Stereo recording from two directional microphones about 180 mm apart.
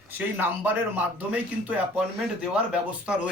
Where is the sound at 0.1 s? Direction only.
10° right (ahead or behind).